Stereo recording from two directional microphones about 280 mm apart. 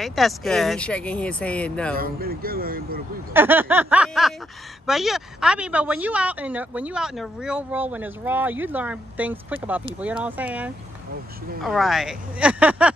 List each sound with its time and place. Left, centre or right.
0.0 s speech: centre
2.0 s speech: right
3.3 s snicker: centre
4.8 s speech: centre